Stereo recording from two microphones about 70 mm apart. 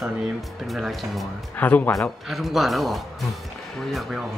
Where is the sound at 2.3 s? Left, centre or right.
Centre.